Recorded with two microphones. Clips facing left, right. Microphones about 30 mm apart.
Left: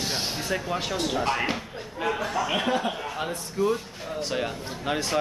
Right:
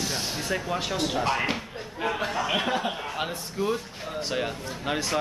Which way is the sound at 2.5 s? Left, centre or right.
Centre.